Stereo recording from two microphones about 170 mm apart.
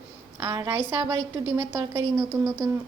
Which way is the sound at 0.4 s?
20° right (ahead or behind).